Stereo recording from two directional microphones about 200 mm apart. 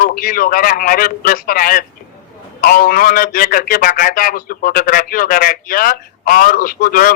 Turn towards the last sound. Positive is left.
turn(degrees=45)  # may be behind; listen again after turning